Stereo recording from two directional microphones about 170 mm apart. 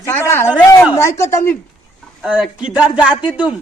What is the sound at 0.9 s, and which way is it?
Speech, 15° left (ahead or behind).